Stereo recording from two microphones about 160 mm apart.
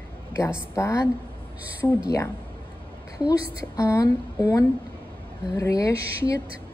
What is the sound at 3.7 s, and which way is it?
A woman's voice, 20° left (ahead or behind).